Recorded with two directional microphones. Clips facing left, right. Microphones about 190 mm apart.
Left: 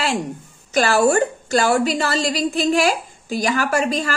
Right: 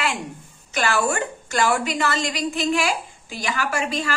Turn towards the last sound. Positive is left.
turn(degrees=40)  # may be behind; listen again after turning